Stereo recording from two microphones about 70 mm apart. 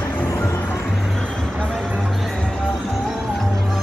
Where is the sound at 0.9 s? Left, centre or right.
Centre.